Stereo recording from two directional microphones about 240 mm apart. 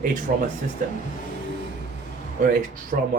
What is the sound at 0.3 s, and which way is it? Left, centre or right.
Speech, right.